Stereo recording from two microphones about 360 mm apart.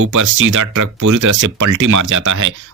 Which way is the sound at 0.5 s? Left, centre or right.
Right.